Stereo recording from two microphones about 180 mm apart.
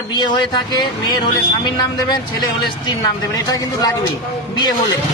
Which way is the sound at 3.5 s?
20° left (ahead or behind).